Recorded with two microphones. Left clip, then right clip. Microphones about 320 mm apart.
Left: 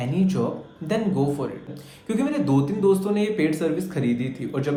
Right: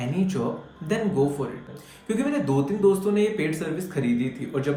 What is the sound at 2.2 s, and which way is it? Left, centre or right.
Speech, centre.